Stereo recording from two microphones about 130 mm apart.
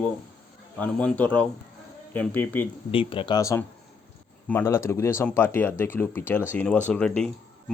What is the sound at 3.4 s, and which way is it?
A man's voice, 25° left (ahead or behind).